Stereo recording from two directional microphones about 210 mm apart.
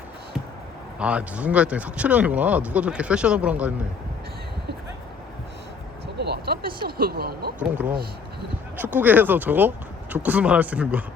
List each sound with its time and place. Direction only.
0.9 s speech: 5° right (ahead or behind)
6.1 s speech: 50° right (ahead or behind)
7.6 s speech: 5° right (ahead or behind)